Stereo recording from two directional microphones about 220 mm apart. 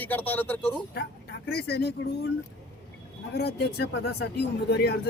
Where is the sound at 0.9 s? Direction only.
45° left (ahead or behind).